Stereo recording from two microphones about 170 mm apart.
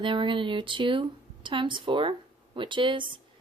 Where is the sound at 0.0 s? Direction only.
30° right (ahead or behind).